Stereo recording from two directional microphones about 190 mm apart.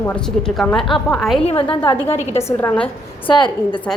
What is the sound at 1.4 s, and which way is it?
Speech, 30° left (ahead or behind).